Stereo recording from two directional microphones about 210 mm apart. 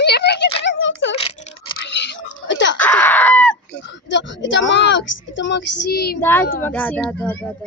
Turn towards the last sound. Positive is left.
turn(degrees=10)  # may be behind; listen again after turning